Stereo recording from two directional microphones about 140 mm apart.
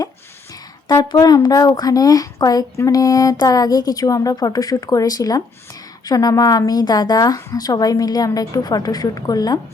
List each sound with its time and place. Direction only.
0.9 s a woman's voice: 30° left (ahead or behind)